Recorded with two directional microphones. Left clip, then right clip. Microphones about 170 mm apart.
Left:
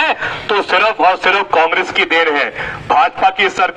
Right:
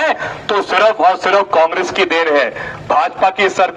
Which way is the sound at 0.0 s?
50° right (ahead or behind).